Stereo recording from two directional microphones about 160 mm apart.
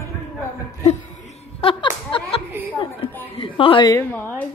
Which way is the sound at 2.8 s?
35° left (ahead or behind).